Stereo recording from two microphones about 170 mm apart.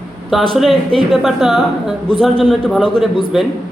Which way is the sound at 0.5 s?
Centre (ahead or behind).